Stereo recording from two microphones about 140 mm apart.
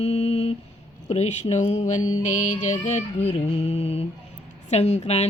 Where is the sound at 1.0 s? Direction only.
55° left (ahead or behind).